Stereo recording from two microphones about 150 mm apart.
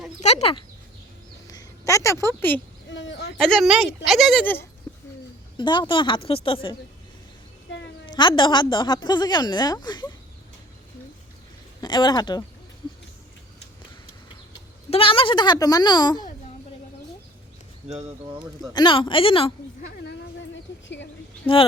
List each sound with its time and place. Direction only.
0.2 s a sound: 50° left (ahead or behind)
1.5 s a woman's voice: 25° left (ahead or behind)
3.3 s a woman's voice: centre (ahead or behind)
5.5 s a woman's voice: 30° left (ahead or behind)
8.1 s a woman's voice: 30° left (ahead or behind)
11.8 s a woman's voice: 30° left (ahead or behind)
14.8 s a woman's voice: 40° left (ahead or behind)
18.7 s a woman's voice: 30° left (ahead or behind)
19.9 s a woman's voice: 90° left